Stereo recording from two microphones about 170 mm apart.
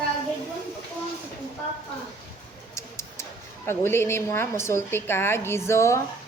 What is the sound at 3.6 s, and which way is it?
A woman's voice, 15° left (ahead or behind).